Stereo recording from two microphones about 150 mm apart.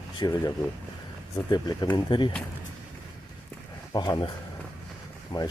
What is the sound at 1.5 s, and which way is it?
Speech, 25° left (ahead or behind).